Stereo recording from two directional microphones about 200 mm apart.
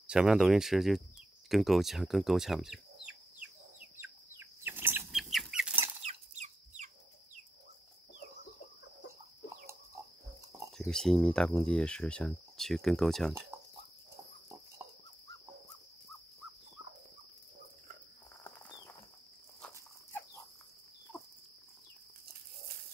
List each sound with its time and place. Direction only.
0.0 s speech: 5° right (ahead or behind)
3.9 s bird flight: 10° right (ahead or behind)
6.0 s chicken: 35° right (ahead or behind)
10.8 s speech: 5° left (ahead or behind)
13.5 s cricket: 10° right (ahead or behind)